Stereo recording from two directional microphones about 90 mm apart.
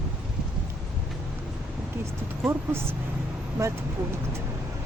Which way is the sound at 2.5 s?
30° right (ahead or behind).